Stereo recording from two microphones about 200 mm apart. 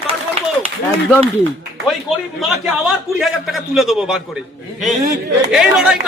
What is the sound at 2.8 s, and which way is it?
A man's voice, centre (ahead or behind).